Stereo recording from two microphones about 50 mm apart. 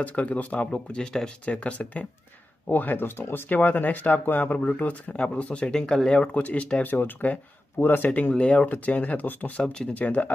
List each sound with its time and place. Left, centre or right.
0.0 s speech: left
3.2 s speech: left
3.4 s speech: left
8.1 s speech: left
9.6 s speech: centre
9.9 s speech: left